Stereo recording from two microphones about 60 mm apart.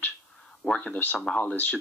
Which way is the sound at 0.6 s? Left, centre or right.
Centre.